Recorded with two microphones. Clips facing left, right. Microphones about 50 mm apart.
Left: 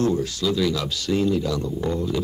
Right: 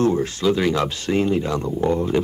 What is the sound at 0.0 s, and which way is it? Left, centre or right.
Speech, right.